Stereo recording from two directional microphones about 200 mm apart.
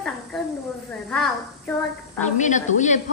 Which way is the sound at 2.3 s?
40° left (ahead or behind).